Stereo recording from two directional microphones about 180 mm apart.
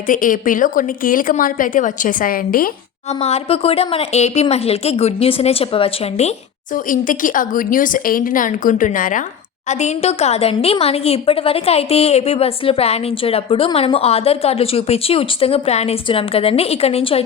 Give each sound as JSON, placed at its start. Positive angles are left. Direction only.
{"t": 0.1, "sound": "a woman's voice", "side_deg": 50}
{"t": 3.1, "sound": "a woman's voice", "side_deg": 35}
{"t": 6.7, "sound": "a woman's voice", "side_deg": 50}